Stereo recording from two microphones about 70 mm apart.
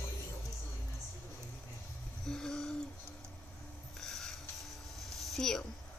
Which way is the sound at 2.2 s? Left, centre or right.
Centre.